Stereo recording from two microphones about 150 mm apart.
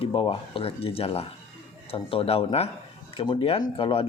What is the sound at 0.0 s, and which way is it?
Speech, 35° left (ahead or behind).